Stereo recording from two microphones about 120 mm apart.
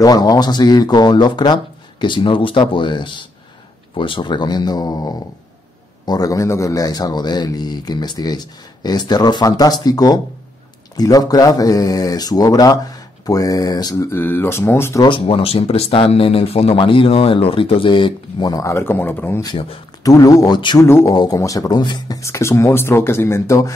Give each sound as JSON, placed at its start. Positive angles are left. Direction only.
{"t": 0.0, "sound": "a man's voice", "side_deg": 30}
{"t": 14.1, "sound": "speech", "side_deg": 20}
{"t": 15.0, "sound": "speech", "side_deg": 45}
{"t": 18.5, "sound": "speech", "side_deg": 25}
{"t": 19.4, "sound": "speech", "side_deg": 45}
{"t": 20.0, "sound": "a man's voice", "side_deg": 30}
{"t": 20.8, "sound": "speech", "side_deg": 20}
{"t": 21.1, "sound": "a man's voice", "side_deg": 30}
{"t": 22.2, "sound": "speech", "side_deg": 25}